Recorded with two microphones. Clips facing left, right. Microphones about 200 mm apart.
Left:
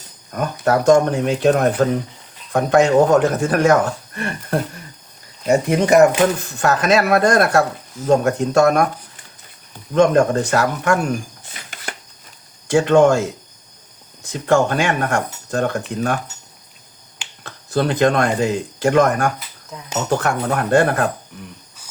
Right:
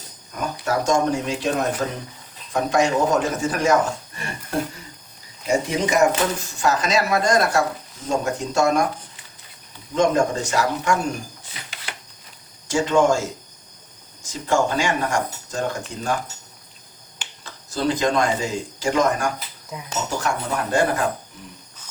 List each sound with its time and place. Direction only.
0.3 s speech: 60° left (ahead or behind)
5.5 s speech: 60° left (ahead or behind)
9.9 s speech: 60° left (ahead or behind)
11.9 s a sound: 45° left (ahead or behind)
12.6 s speech: 60° left (ahead or behind)
17.4 s speech: 60° left (ahead or behind)